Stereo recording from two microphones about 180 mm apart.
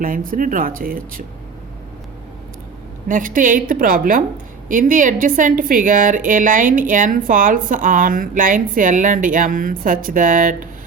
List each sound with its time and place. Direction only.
0.0 s a woman's voice: 50° right (ahead or behind)
3.1 s a woman's voice: 50° right (ahead or behind)